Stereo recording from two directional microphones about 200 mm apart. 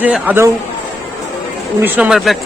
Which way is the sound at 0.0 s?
10° right (ahead or behind).